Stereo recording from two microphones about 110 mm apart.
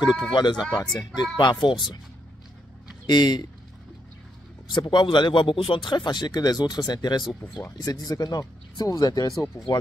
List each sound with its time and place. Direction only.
0.3 s speech: 45° left (ahead or behind)
3.1 s speech: 40° left (ahead or behind)
4.7 s speech: 45° left (ahead or behind)